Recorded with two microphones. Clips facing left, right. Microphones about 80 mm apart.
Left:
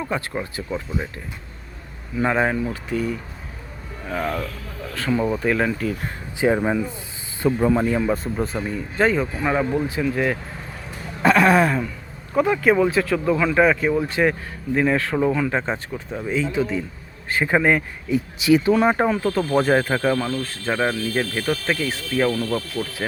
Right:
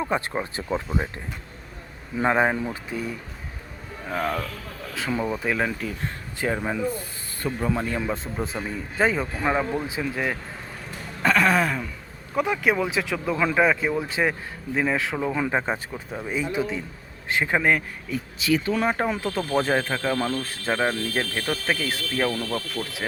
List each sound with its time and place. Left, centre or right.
0.0 s speech: centre
2.1 s speech: centre
4.0 s speech: centre
6.4 s speech: centre
7.7 s speech: centre
11.3 s speech: centre
14.0 s speech: centre
16.3 s speech: centre
17.2 s speech: centre
19.1 s speech: centre
19.8 s speech: centre
20.3 s speech: centre
20.7 s speech: centre